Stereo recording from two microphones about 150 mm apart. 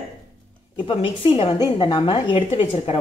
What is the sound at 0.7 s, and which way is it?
Speech, 35° left (ahead or behind).